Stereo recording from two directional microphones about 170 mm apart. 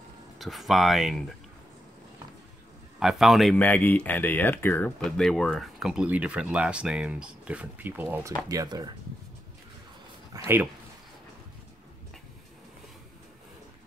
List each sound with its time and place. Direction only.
0.4 s speech: centre (ahead or behind)
3.0 s speech: centre (ahead or behind)
8.5 s speech: 20° right (ahead or behind)
10.3 s speech: 15° right (ahead or behind)